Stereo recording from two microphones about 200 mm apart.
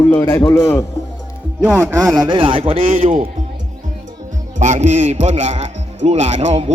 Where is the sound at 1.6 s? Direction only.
5° right (ahead or behind).